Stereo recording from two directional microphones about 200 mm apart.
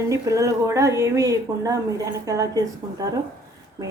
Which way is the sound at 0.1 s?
15° right (ahead or behind).